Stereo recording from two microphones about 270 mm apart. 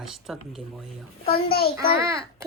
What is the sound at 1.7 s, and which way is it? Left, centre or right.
Speech, centre.